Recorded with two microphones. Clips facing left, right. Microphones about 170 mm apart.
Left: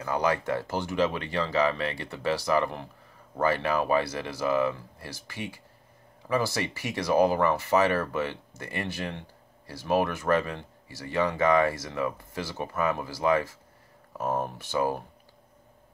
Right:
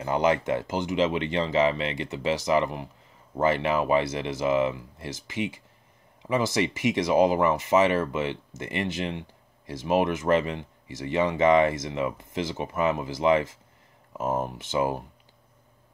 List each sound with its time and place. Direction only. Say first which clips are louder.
0.0 s speech: right 3 dB; 25° right (ahead or behind)